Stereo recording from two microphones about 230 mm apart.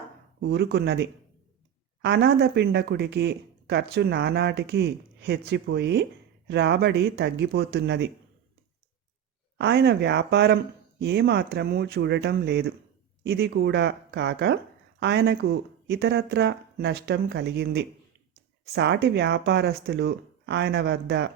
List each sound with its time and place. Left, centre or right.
0.3 s speech: right
9.6 s speech: right